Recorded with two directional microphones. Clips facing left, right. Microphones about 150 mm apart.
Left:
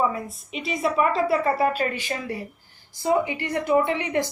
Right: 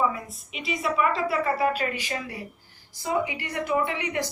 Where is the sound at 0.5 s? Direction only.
30° left (ahead or behind).